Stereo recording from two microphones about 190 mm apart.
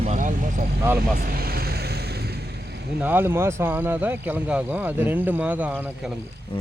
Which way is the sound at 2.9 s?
10° right (ahead or behind).